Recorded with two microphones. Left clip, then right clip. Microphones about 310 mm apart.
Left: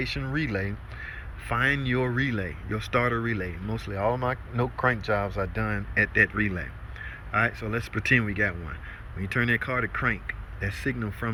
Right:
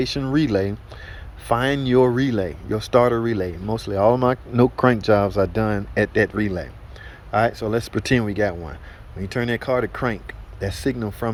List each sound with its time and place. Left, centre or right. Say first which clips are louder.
0.0 s speech: right 8 dB; right